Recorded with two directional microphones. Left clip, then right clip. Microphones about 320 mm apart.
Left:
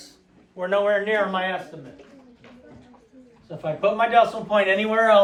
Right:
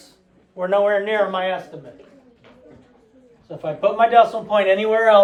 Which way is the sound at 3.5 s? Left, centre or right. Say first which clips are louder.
Right 2 dB; right.